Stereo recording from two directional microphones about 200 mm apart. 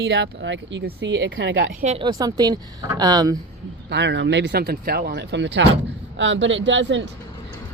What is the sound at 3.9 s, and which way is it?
Speech, 60° right (ahead or behind).